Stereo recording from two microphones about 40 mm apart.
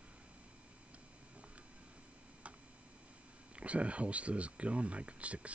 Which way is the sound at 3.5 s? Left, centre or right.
Right.